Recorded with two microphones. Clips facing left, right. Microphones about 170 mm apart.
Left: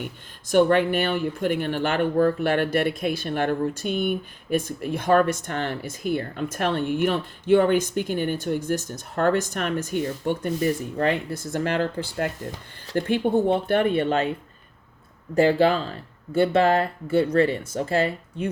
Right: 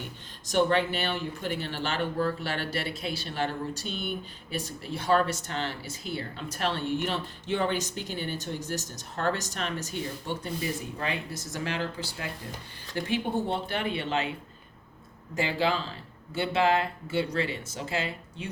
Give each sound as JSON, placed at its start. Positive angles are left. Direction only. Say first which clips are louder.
{"t": 0.4, "sound": "speech", "louder": "left 6 dB", "side_deg": 50}
{"t": 15.4, "sound": "speech", "louder": "left 9 dB", "side_deg": 55}